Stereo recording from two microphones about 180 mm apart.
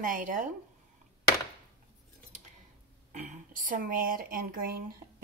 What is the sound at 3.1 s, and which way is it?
Speech, 45° right (ahead or behind).